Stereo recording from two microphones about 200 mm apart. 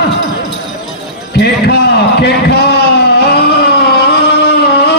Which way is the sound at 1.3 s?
55° left (ahead or behind).